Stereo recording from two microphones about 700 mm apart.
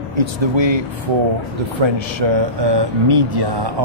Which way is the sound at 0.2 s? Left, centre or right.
Right.